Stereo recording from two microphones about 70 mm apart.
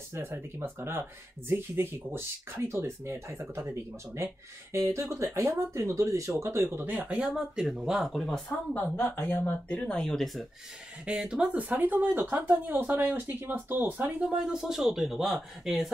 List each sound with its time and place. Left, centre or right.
0.1 s speech: right; by 8.1 s centre
8.1 s speech: centre
8.7 s speech: left
9.8 s speech: centre
11.1 s speech: centre
14.3 s speech: centre